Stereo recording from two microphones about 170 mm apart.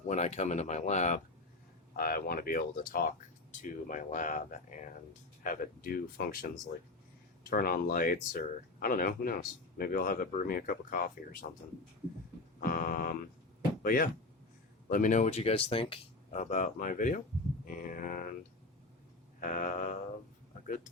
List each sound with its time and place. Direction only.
0.1 s speech: 40° left (ahead or behind)
1.9 s speech: 60° left (ahead or behind)
7.5 s speech: 60° left (ahead or behind)
12.5 s a sound: 60° left (ahead or behind)
13.8 s speech: 55° left (ahead or behind); by 16.4 s 35° left (ahead or behind)
16.4 s speech: 50° left (ahead or behind)
19.4 s speech: 55° left (ahead or behind)